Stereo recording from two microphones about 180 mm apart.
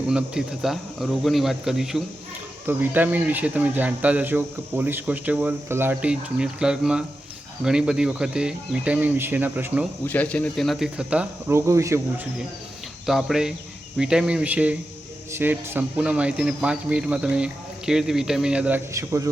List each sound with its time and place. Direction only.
0.1 s speech: 5° right (ahead or behind)
10.1 s speech: 10° left (ahead or behind); by 12.3 s 15° right (ahead or behind)
13.1 s speech: centre (ahead or behind)
18.9 s speech: 15° right (ahead or behind)